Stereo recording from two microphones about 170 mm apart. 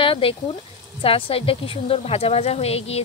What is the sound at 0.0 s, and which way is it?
A woman's voice, 30° left (ahead or behind).